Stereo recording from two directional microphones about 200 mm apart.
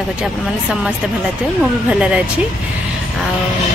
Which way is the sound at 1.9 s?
5° right (ahead or behind).